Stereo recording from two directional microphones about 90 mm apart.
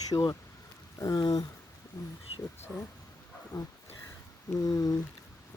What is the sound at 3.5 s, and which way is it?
Speech, 45° left (ahead or behind).